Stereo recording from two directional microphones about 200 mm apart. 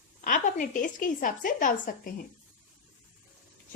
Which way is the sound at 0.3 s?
40° left (ahead or behind).